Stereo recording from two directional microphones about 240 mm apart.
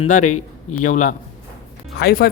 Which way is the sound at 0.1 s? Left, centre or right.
Left.